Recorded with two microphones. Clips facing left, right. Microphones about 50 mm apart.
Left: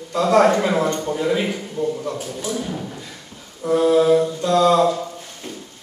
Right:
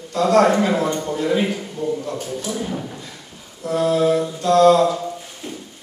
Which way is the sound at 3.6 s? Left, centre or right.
Centre.